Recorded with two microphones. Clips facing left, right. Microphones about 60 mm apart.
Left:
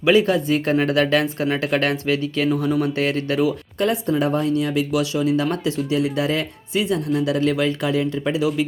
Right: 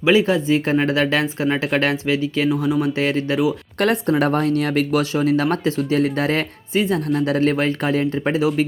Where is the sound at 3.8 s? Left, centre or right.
Right.